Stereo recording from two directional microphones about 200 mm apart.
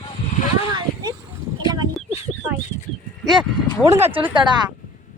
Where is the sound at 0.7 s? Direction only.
20° right (ahead or behind).